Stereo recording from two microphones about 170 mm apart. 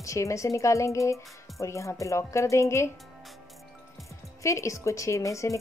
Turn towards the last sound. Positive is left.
turn(degrees=15)  # may be behind; listen again after turning